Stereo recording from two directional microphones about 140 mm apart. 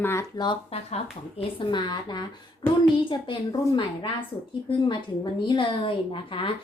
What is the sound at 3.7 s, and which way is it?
A woman's voice, 35° left (ahead or behind).